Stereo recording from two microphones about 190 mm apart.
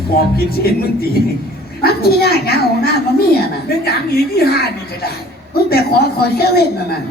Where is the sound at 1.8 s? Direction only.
55° left (ahead or behind).